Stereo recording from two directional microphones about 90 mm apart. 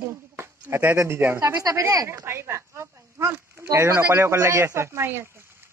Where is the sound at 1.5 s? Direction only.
40° right (ahead or behind).